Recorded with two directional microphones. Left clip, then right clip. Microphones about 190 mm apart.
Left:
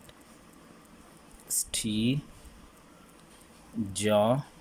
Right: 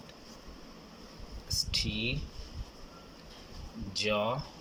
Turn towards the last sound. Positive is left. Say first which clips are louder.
# left 6 dB
turn(degrees=30)  # may be behind; listen again after turning